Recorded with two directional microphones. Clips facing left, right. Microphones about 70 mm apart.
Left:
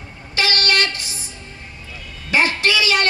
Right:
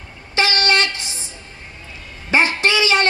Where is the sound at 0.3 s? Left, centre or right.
Right.